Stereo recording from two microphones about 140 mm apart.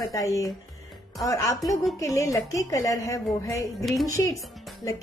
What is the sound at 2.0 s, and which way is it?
A woman's voice, 25° left (ahead or behind).